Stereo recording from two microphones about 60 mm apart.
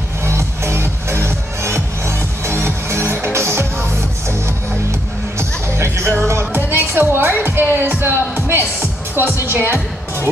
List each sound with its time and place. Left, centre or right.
0.2 s music: right
5.4 s music: right
9.5 s speech: right